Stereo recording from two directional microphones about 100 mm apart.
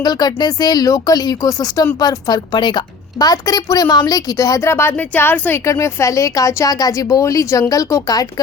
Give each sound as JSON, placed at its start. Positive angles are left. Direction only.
{"t": 0.0, "sound": "speech", "side_deg": 45}